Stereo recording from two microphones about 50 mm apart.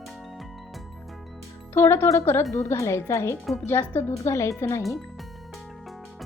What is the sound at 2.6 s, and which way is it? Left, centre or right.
Speech, left.